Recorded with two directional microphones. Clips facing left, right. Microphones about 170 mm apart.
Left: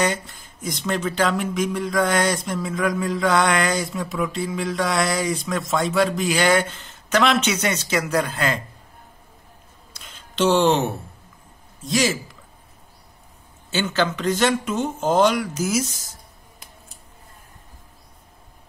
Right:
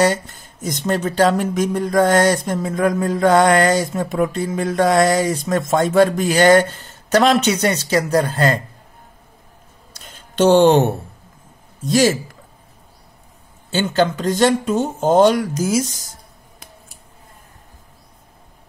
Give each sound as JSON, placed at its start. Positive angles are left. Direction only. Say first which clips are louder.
{"t": 0.0, "sound": "speech", "louder": "right 6 dB", "side_deg": -40}
{"t": 10.3, "sound": "a man's voice", "louder": "right 6 dB", "side_deg": -45}
{"t": 13.8, "sound": "speech", "louder": "right 4 dB", "side_deg": -30}